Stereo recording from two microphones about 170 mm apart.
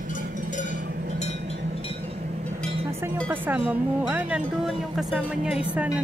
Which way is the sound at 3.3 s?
10° right (ahead or behind).